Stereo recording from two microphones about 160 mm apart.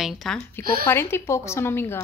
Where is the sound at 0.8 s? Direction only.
15° left (ahead or behind).